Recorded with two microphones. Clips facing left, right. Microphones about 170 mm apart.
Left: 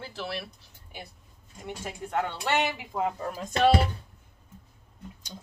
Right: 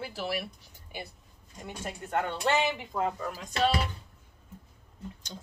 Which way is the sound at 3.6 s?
55° left (ahead or behind).